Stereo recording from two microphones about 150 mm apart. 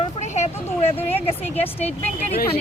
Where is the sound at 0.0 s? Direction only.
50° left (ahead or behind).